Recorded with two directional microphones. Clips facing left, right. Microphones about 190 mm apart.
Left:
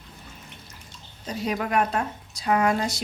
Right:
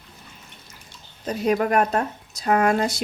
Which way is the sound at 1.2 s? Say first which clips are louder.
Right 7 dB; 50° right (ahead or behind).